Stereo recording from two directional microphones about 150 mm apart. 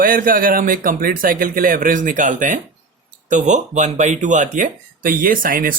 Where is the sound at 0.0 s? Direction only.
65° right (ahead or behind).